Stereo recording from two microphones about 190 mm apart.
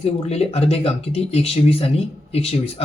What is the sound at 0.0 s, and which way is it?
Speech, 35° left (ahead or behind).